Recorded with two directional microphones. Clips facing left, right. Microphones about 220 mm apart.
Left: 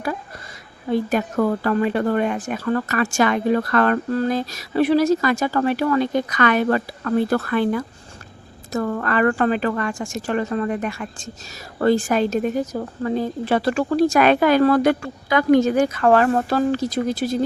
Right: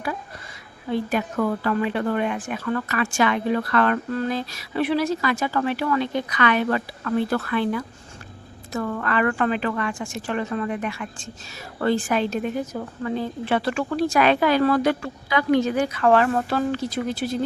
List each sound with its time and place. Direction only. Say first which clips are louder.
0.9 s a woman's voice: left 3 dB; 40° left (ahead or behind)